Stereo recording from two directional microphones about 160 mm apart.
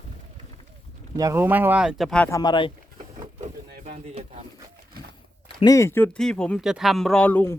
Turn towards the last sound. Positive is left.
turn(degrees=10)  # may be behind; listen again after turning